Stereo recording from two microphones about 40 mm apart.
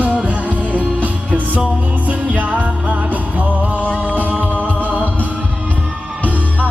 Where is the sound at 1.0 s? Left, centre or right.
Right.